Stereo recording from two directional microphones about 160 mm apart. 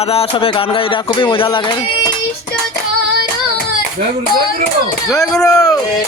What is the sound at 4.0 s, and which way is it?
Speech, 50° right (ahead or behind).